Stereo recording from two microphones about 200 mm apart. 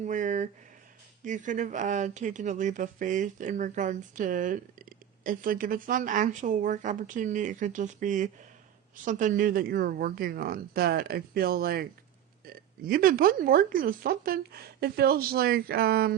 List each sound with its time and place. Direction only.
0.0 s speech: 40° right (ahead or behind)